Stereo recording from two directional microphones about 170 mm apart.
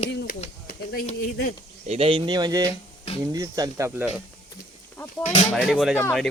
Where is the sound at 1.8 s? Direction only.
40° right (ahead or behind); by 3.9 s 20° right (ahead or behind).